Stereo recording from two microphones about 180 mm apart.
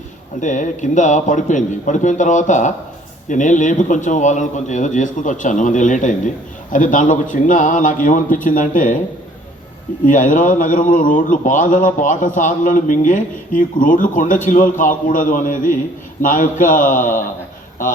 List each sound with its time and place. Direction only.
0.3 s a man's voice: 45° left (ahead or behind)
10.1 s a man's voice: 45° left (ahead or behind)